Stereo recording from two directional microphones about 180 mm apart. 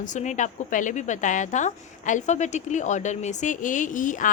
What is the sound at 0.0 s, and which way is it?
A woman's voice, 45° left (ahead or behind).